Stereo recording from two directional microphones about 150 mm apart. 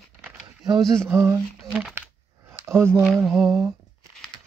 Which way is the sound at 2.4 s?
15° right (ahead or behind).